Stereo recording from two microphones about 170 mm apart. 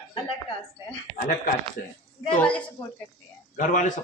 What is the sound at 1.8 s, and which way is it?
Speech, 70° left (ahead or behind).